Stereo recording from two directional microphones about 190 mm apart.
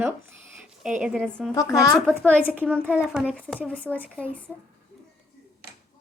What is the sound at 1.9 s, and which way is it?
Speech, 5° left (ahead or behind).